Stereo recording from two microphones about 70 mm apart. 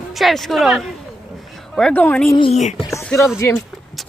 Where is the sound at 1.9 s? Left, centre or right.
Left.